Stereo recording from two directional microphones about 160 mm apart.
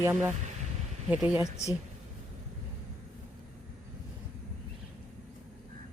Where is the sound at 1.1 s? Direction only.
5° right (ahead or behind).